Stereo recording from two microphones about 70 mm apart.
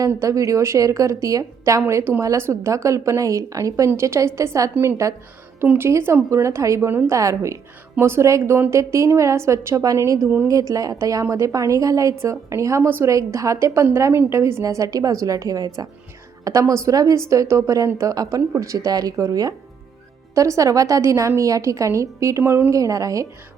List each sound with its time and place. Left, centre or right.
0.2 s a woman's voice: right
10.2 s speech: right
10.5 s a woman's voice: right
22.7 s a woman's voice: right